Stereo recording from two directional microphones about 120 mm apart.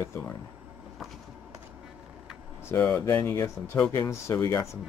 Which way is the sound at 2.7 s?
20° left (ahead or behind).